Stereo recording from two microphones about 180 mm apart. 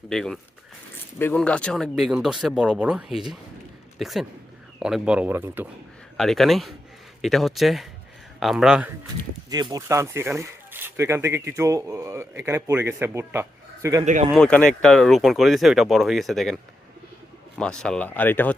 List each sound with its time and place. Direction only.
0.1 s speech: 5° left (ahead or behind)
6.1 s speech: centre (ahead or behind)
9.5 s speech: 20° right (ahead or behind)
14.0 s speech: 40° right (ahead or behind)
14.3 s speech: 5° left (ahead or behind)
17.6 s speech: 5° left (ahead or behind)